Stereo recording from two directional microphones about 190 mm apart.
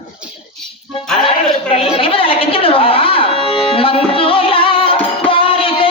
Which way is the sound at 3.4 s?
30° left (ahead or behind).